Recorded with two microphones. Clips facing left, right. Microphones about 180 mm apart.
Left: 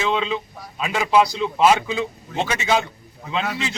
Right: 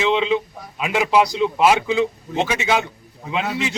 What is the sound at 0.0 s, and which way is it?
A man's voice, 15° right (ahead or behind).